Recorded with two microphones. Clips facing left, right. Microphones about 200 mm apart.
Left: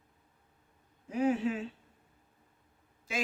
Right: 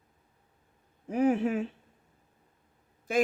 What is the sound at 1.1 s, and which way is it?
Speech, 55° right (ahead or behind).